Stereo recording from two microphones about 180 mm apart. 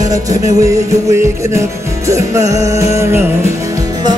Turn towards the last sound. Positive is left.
turn(degrees=-15)  # may be behind; listen again after turning